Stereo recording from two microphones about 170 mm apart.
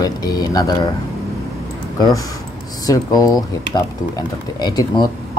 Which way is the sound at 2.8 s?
20° left (ahead or behind).